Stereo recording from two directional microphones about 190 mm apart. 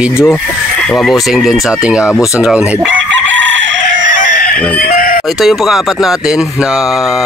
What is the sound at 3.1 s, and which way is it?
Chicken, 75° right (ahead or behind).